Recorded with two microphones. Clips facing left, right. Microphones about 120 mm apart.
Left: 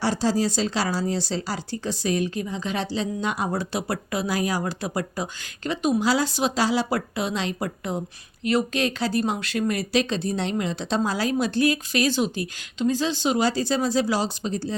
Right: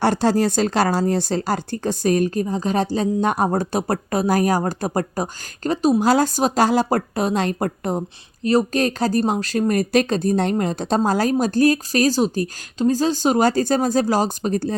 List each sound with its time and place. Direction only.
0.0 s speech: 60° right (ahead or behind)